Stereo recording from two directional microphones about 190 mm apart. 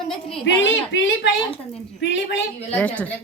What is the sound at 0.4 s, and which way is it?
Speech, 75° left (ahead or behind).